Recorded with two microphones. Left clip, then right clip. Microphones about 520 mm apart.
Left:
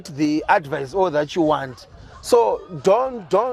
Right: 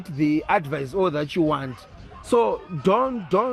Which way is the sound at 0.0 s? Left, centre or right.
Left.